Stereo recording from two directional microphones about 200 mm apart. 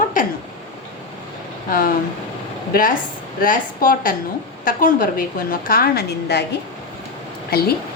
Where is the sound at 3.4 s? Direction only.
45° left (ahead or behind).